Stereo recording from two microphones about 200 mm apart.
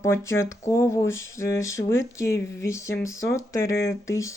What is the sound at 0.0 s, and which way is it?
Speech, 15° left (ahead or behind).